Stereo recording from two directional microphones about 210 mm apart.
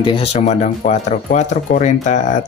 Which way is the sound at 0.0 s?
25° left (ahead or behind).